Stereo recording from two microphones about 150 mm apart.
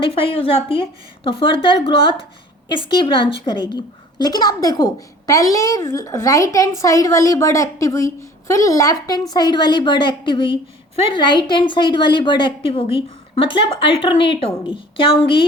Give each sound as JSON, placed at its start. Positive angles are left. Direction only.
{"t": 0.0, "sound": "a woman's voice", "side_deg": 35}